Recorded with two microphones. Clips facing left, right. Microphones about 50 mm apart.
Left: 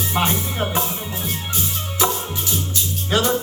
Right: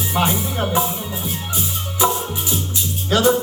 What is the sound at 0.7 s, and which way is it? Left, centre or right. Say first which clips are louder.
Music: right 3 dB; centre.